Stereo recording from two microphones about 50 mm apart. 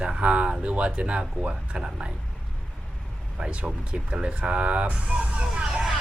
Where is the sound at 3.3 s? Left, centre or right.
Centre.